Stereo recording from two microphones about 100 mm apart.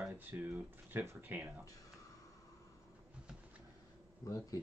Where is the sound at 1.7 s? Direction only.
35° left (ahead or behind).